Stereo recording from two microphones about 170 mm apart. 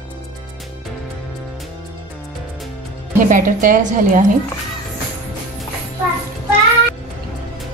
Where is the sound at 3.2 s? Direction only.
50° right (ahead or behind).